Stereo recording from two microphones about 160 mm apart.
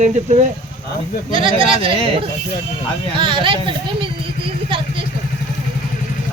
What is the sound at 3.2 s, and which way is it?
Speech, 30° right (ahead or behind).